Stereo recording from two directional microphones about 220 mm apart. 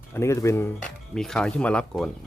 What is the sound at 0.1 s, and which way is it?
Speech, 10° left (ahead or behind).